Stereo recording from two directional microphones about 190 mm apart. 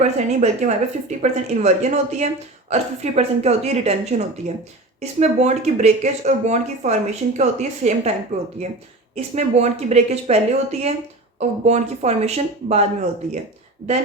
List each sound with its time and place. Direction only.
0.0 s a woman's voice: 40° right (ahead or behind)